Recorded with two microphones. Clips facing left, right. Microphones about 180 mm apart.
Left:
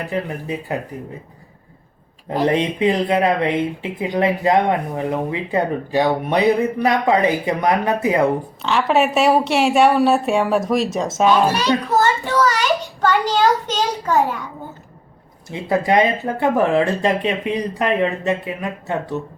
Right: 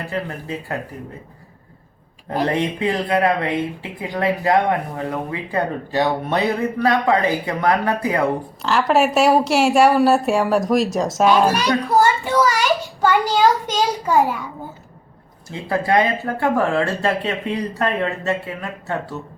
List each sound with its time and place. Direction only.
0.1 s speech: 15° left (ahead or behind)
2.3 s speech: 20° left (ahead or behind)
8.6 s a woman's voice: centre (ahead or behind)
15.6 s speech: 20° left (ahead or behind)